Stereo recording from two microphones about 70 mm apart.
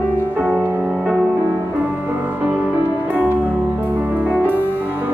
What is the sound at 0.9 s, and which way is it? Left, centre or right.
Music, centre.